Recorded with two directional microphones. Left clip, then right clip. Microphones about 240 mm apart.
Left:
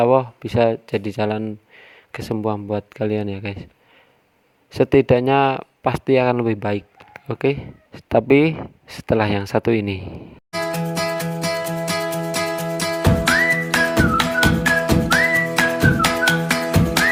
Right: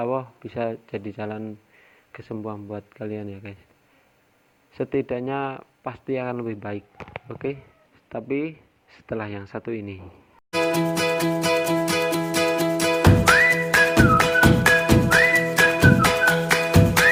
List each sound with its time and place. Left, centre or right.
0.0 s speech: left
4.7 s speech: left
10.5 s music: centre